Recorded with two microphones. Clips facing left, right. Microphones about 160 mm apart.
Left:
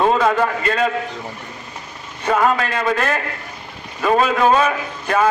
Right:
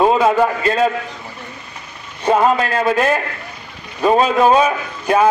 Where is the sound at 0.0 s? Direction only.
10° right (ahead or behind).